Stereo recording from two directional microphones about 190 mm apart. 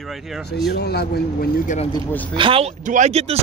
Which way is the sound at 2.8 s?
40° right (ahead or behind).